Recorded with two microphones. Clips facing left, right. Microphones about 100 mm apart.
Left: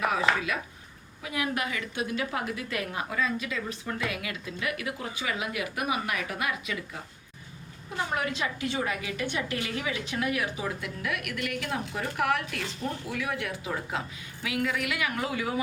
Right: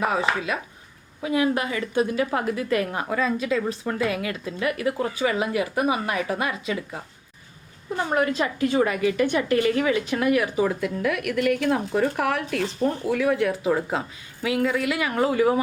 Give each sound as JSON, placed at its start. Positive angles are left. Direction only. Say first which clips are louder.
{"t": 0.0, "sound": "a woman's voice", "louder": "right 3 dB", "side_deg": -30}
{"t": 8.1, "sound": "a woman's voice", "louder": "right 9 dB", "side_deg": -45}